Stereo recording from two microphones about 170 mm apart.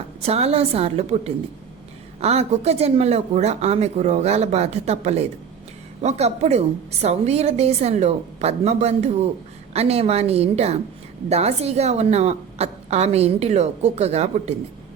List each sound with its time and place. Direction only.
0.2 s a woman's voice: 35° right (ahead or behind)